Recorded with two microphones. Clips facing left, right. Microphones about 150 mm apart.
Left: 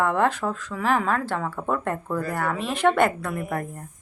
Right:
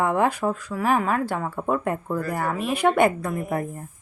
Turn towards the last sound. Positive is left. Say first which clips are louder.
# right 2 dB
turn(degrees=0)  # may be behind; listen again after turning